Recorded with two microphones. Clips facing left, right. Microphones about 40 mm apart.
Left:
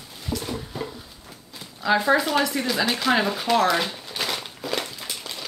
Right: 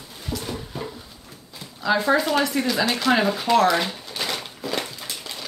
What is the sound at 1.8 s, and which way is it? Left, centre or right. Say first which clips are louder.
Speech: even; centre.